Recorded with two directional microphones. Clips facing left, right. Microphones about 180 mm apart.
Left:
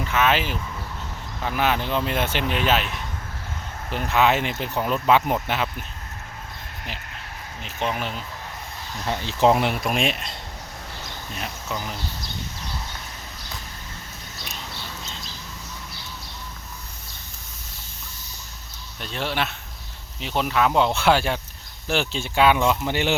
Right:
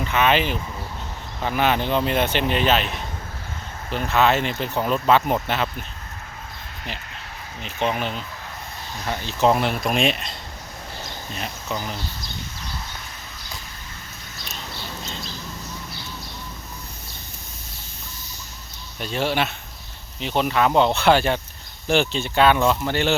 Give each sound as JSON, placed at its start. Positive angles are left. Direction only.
{"t": 0.1, "sound": "speech", "side_deg": 5}
{"t": 3.9, "sound": "speech", "side_deg": 15}
{"t": 7.9, "sound": "speech", "side_deg": 5}
{"t": 9.0, "sound": "speech", "side_deg": 25}
{"t": 9.6, "sound": "speech", "side_deg": 10}
{"t": 11.3, "sound": "speech", "side_deg": 0}
{"t": 18.9, "sound": "speech", "side_deg": -5}